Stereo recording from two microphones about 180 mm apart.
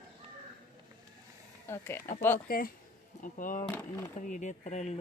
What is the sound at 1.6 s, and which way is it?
Speech, 15° left (ahead or behind).